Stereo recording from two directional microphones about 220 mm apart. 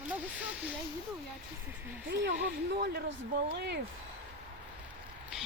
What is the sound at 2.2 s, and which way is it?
Speech, 45° right (ahead or behind).